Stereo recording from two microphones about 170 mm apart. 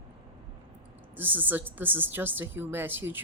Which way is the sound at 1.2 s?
10° right (ahead or behind).